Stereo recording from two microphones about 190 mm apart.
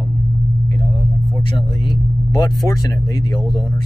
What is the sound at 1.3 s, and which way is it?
Speech, 25° left (ahead or behind).